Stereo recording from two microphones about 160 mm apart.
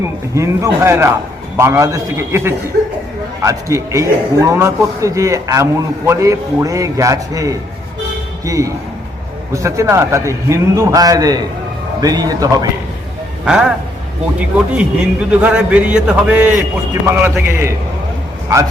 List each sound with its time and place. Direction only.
0.3 s a man's voice: 20° right (ahead or behind)
13.4 s a man's voice: 5° right (ahead or behind)